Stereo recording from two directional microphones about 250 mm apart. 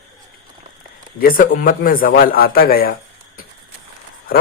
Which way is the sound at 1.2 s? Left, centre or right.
Left.